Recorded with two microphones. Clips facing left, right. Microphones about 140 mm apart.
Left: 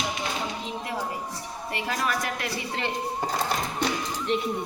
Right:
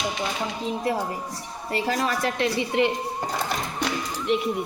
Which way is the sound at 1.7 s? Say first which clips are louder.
Right 4 dB; 35° right (ahead or behind).